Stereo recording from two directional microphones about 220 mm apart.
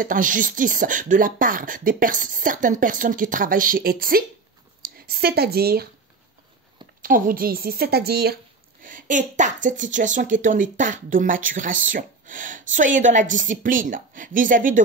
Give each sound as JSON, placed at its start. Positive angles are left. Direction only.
{"t": 0.0, "sound": "speech", "side_deg": -35}
{"t": 7.0, "sound": "a woman's voice", "side_deg": -40}